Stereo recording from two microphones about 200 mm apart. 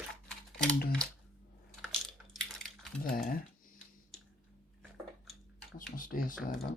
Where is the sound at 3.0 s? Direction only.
45° left (ahead or behind).